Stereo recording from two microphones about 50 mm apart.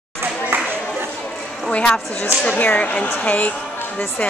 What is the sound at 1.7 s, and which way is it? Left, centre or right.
A woman's voice, left.